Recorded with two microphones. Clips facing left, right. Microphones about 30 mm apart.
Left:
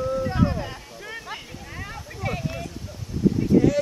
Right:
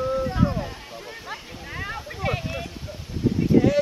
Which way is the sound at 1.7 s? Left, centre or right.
Right.